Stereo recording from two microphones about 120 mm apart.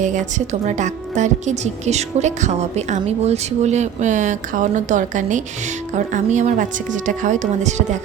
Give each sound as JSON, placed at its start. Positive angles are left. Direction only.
{"t": 0.0, "sound": "a woman's voice", "side_deg": -90}